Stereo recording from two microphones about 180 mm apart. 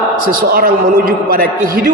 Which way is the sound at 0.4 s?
55° right (ahead or behind).